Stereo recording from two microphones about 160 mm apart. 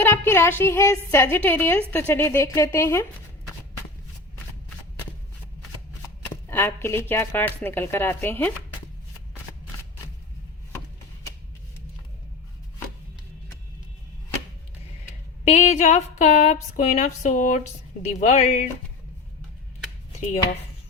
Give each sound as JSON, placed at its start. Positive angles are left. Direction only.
{"t": 0.0, "sound": "a woman's voice", "side_deg": 15}
{"t": 6.5, "sound": "speech", "side_deg": 15}
{"t": 15.4, "sound": "speech", "side_deg": 45}